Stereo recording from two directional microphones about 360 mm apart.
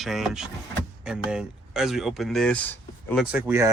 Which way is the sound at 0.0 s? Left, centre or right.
Centre.